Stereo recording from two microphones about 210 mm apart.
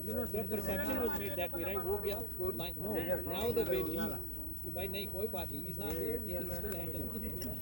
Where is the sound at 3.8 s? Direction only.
60° left (ahead or behind).